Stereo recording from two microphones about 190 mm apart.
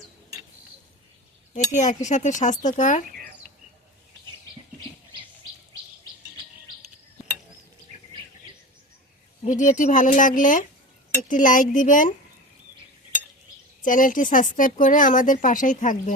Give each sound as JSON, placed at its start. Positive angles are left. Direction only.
{"t": 1.5, "sound": "speech", "side_deg": 40}
{"t": 9.5, "sound": "speech", "side_deg": 40}
{"t": 13.8, "sound": "speech", "side_deg": 45}